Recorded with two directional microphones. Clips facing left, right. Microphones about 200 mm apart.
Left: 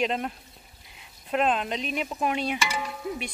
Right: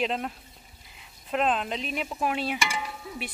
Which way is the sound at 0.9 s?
Centre (ahead or behind).